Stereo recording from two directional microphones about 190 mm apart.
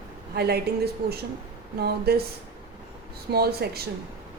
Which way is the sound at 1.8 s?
55° right (ahead or behind).